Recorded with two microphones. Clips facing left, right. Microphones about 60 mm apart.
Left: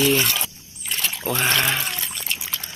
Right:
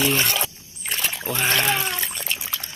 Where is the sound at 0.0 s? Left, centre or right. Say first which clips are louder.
Left 2 dB; right.